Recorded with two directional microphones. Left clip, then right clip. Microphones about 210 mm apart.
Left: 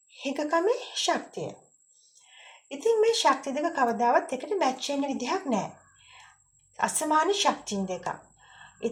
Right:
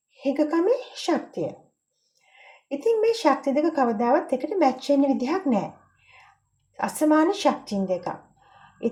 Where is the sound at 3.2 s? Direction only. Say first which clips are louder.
Right 4 dB; 30° left (ahead or behind).